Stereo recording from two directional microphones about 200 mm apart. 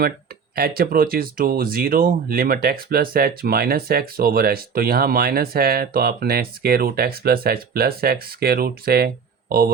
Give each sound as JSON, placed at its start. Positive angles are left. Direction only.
{"t": 0.5, "sound": "speech", "side_deg": -50}